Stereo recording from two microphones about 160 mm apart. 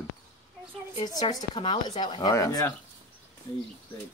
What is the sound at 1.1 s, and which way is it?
Speech, 30° left (ahead or behind).